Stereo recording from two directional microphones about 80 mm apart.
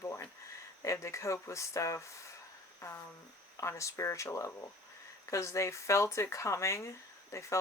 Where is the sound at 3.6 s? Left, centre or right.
Left.